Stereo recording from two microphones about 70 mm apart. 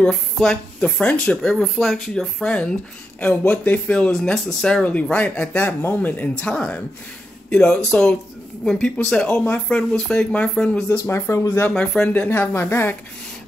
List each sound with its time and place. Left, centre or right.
0.0 s speech: centre
2.4 s speech: centre
5.1 s speech: centre
11.1 s speech: left
11.7 s speech: centre
12.1 s speech: left